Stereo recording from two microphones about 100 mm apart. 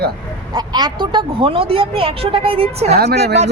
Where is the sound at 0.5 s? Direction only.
45° right (ahead or behind); by 2.9 s 90° right.